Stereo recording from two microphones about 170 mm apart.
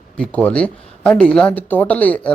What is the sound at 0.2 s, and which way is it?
Speech, 10° left (ahead or behind).